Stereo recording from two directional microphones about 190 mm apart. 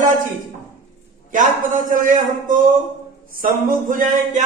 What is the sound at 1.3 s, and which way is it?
A man's voice, 45° right (ahead or behind).